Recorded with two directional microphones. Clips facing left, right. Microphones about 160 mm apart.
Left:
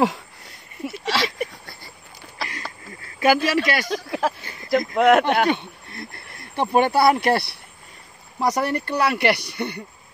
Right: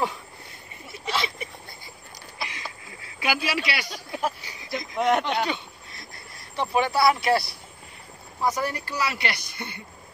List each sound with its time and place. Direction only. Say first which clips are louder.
0.8 s a sound: left 5 dB; 90° left; by 1.9 s 70° left (ahead or behind)
3.2 s speech: left 9 dB; 45° left (ahead or behind)
3.9 s speech: left 6 dB; 90° left
4.4 s a sound: left 4 dB; 55° left (ahead or behind)
4.6 s speech: left 8 dB; 70° left (ahead or behind)
8.4 s speech: left 4 dB; 75° left (ahead or behind)